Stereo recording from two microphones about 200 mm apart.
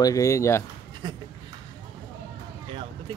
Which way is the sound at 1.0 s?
20° right (ahead or behind).